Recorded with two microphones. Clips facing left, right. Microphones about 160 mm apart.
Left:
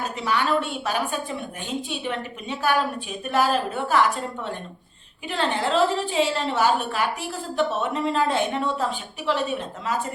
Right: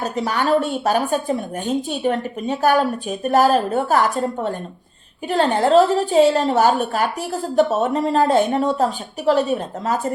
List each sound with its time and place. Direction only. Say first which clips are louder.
0.0 s a woman's voice: right 4 dB; 40° right (ahead or behind)